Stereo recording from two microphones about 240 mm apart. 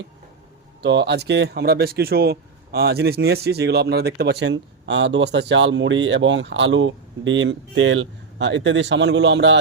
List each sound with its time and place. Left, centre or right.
0.8 s speech: right